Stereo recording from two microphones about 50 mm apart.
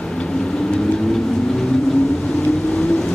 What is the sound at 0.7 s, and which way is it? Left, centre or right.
Vehicle, centre.